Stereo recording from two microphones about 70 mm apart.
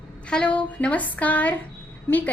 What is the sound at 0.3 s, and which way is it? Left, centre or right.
A woman's voice, centre.